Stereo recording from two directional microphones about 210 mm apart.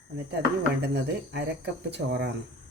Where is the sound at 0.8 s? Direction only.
50° right (ahead or behind).